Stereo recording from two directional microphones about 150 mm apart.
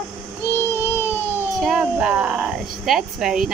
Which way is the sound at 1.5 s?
5° right (ahead or behind).